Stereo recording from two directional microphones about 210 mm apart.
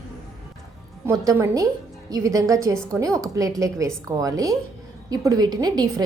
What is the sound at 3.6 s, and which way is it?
A woman's voice, 15° right (ahead or behind).